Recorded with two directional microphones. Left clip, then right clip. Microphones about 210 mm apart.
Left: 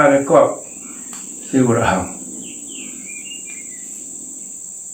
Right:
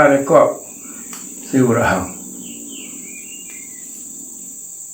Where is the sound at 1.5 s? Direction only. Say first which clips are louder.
Right 1 dB; 10° right (ahead or behind).